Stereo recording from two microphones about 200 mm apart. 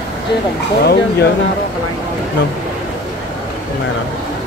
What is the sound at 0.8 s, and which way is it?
Speech, 50° left (ahead or behind).